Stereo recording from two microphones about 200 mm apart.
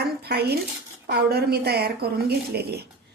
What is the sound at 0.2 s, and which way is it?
A woman's voice, 55° right (ahead or behind).